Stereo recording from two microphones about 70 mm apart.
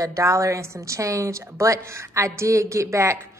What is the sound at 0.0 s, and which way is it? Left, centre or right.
A woman's voice, right.